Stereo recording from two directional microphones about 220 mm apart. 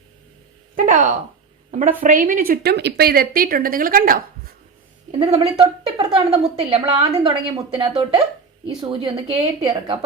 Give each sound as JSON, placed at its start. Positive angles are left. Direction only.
{"t": 0.8, "sound": "speech", "side_deg": -35}
{"t": 5.2, "sound": "a woman's voice", "side_deg": -30}